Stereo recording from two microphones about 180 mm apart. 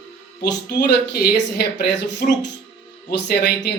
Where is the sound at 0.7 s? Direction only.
65° left (ahead or behind).